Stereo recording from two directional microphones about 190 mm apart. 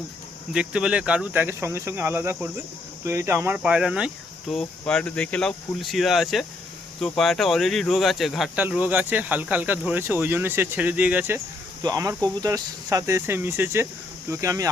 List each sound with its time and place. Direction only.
0.5 s speech: 5° right (ahead or behind)